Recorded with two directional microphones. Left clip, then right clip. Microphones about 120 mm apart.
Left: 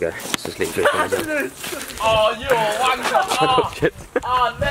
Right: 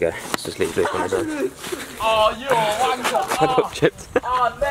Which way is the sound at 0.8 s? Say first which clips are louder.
Left 5 dB; 25° left (ahead or behind).